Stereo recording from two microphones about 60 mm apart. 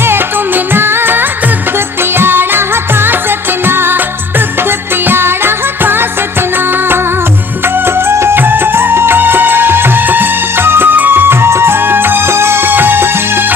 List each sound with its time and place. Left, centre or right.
0.0 s music: right
7.6 s music: right